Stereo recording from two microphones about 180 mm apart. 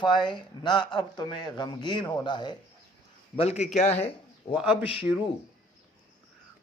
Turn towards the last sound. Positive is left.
turn(degrees=-5)  # may be behind; listen again after turning